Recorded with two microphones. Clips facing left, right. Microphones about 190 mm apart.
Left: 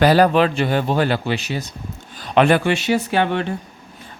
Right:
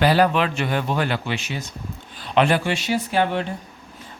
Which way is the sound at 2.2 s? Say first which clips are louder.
Left 4 dB; 50° left (ahead or behind).